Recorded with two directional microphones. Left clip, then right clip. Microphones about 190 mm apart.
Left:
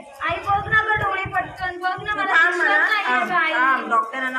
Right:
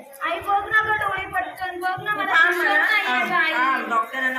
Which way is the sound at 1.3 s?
20° right (ahead or behind).